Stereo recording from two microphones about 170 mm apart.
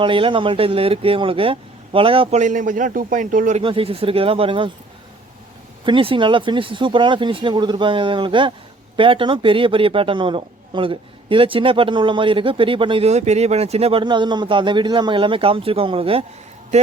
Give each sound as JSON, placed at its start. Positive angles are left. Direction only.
{"t": 0.0, "sound": "a man's voice", "side_deg": -30}
{"t": 2.4, "sound": "a man's voice", "side_deg": -50}
{"t": 3.6, "sound": "a man's voice", "side_deg": -30}
{"t": 5.8, "sound": "a man's voice", "side_deg": -30}